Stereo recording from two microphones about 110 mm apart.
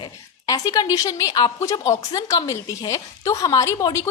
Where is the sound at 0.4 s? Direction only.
30° left (ahead or behind).